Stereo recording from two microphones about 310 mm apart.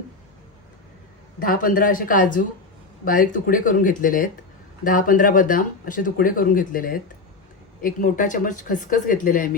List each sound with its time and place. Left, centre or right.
1.4 s speech: left